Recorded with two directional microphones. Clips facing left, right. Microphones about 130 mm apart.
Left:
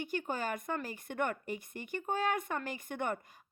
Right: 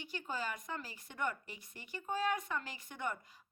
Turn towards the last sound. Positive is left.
turn(degrees=55)  # may be behind; listen again after turning